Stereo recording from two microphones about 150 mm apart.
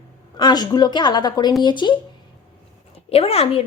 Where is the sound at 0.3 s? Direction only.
30° left (ahead or behind).